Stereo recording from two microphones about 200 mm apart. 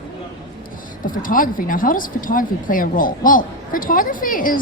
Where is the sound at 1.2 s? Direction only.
45° left (ahead or behind).